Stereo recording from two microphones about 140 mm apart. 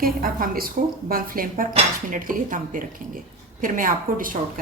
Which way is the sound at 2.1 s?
75° right (ahead or behind).